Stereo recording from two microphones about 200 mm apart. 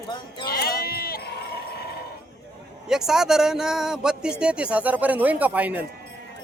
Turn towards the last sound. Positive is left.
turn(degrees=-5)  # may be behind; listen again after turning